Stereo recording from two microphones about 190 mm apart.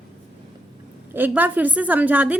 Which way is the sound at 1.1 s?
10° right (ahead or behind).